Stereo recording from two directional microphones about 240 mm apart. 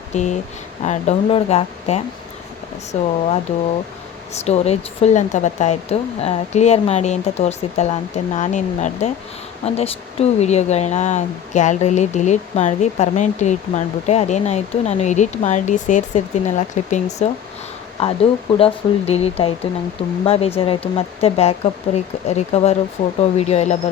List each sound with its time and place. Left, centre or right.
0.1 s speech: left
4.3 s speech: left